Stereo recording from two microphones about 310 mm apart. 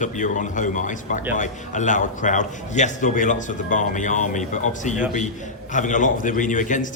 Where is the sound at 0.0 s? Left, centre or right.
Left.